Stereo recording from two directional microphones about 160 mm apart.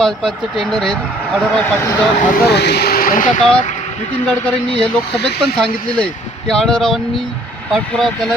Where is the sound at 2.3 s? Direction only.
85° left; by 3.4 s 55° left (ahead or behind).